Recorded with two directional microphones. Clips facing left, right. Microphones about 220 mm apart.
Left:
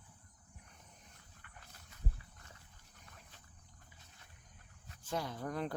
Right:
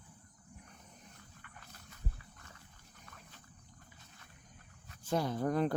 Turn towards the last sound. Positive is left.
turn(degrees=-45)  # may be behind; listen again after turning